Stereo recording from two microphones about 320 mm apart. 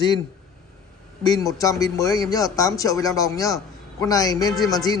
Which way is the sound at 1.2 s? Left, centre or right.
Centre.